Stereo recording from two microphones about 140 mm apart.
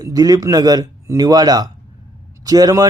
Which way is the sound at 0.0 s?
25° right (ahead or behind).